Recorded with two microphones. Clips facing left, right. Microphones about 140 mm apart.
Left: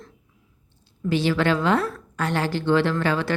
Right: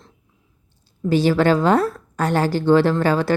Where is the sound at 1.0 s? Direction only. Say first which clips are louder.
Right 5 dB; 40° right (ahead or behind).